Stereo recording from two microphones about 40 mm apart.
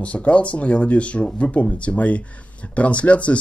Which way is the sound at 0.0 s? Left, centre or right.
Left.